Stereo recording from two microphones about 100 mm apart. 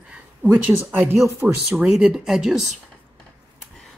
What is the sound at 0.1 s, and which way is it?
Speech, 15° right (ahead or behind).